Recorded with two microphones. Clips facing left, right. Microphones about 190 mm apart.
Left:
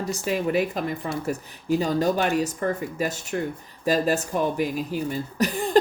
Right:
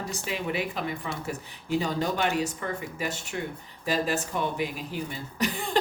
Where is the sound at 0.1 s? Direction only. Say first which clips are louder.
Left 9 dB; 40° left (ahead or behind).